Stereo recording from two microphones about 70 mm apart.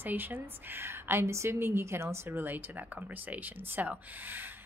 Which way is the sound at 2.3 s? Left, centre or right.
Right.